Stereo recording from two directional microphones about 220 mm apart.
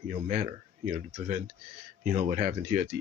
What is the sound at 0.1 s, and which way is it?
Speech, 35° right (ahead or behind).